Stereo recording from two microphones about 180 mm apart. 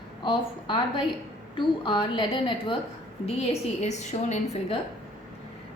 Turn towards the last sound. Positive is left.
turn(degrees=40)  # may be behind; listen again after turning